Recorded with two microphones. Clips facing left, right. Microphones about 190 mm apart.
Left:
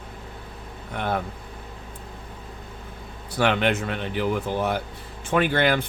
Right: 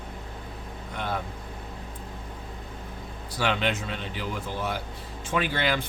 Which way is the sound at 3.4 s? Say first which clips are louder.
Left 5 dB; 55° left (ahead or behind).